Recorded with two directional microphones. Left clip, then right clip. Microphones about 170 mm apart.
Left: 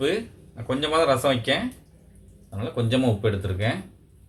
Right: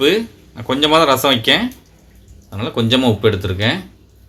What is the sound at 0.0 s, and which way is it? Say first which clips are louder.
Speech: right 10 dB; 65° right (ahead or behind).